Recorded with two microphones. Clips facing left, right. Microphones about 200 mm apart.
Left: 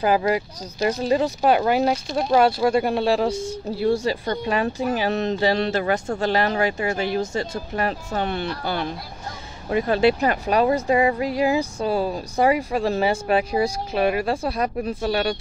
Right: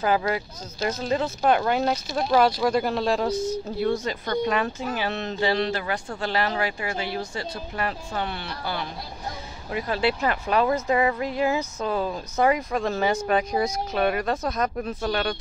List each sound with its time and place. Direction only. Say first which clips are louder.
0.2 s speech: left 5 dB; 15° left (ahead or behind)
3.9 s speech: left 3 dB; 30° left (ahead or behind); by 8.8 s 50° left (ahead or behind)
10.0 s speech: left 3 dB; 35° left (ahead or behind)
11.1 s speech: left 4 dB; 10° left (ahead or behind)